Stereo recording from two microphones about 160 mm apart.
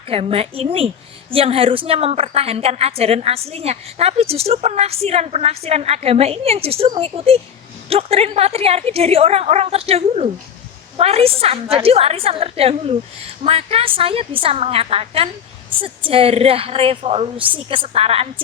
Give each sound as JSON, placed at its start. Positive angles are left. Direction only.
{"t": 0.1, "sound": "a woman's voice", "side_deg": -35}